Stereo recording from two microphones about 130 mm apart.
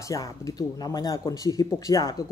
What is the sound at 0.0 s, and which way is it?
A woman's voice, 25° left (ahead or behind).